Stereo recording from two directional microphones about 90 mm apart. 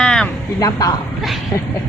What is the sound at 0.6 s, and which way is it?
Speech, 40° left (ahead or behind).